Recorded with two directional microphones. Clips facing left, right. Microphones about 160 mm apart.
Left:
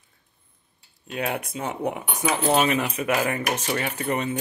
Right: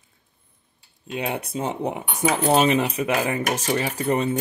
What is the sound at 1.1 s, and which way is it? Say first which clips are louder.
Speech: right 1 dB; 25° right (ahead or behind).